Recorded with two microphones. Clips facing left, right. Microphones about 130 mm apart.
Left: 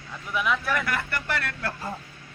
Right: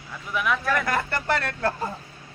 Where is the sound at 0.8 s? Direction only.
35° right (ahead or behind).